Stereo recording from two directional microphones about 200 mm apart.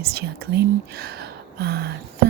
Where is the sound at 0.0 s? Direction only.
50° right (ahead or behind).